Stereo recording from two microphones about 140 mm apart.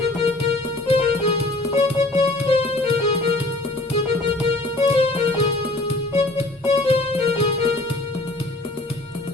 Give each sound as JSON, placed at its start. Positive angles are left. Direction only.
{"t": 0.9, "sound": "music", "side_deg": 45}
{"t": 4.4, "sound": "music", "side_deg": 40}